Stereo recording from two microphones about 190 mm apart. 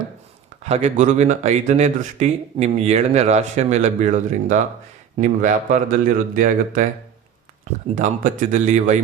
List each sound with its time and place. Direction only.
0.6 s speech: 35° right (ahead or behind)
7.9 s speech: 45° right (ahead or behind)